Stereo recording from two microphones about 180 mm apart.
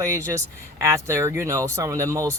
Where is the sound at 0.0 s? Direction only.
15° right (ahead or behind).